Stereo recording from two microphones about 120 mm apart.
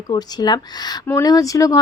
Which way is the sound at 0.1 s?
35° left (ahead or behind).